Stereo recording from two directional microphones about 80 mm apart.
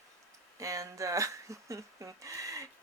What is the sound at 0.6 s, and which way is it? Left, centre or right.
Speech, right.